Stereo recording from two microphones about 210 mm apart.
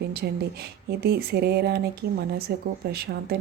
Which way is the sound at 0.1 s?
50° right (ahead or behind).